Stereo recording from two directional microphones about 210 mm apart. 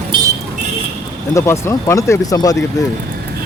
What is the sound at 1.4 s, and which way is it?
Speech, 15° left (ahead or behind).